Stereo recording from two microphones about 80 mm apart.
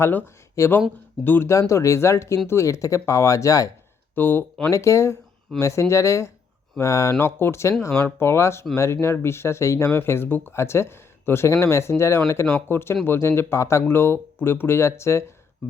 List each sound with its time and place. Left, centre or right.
0.0 s speech: left
0.6 s speech: left
1.2 s speech: left
1.5 s speech: left
4.1 s speech: left
4.7 s speech: left